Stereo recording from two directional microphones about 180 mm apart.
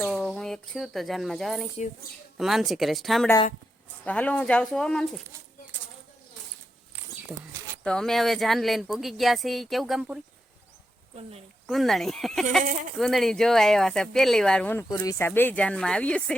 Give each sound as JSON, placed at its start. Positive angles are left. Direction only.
{"t": 0.0, "sound": "speech", "side_deg": 5}
{"t": 7.9, "sound": "speech", "side_deg": 5}
{"t": 11.1, "sound": "speech", "side_deg": -35}
{"t": 11.6, "sound": "speech", "side_deg": 0}
{"t": 15.3, "sound": "speech", "side_deg": 10}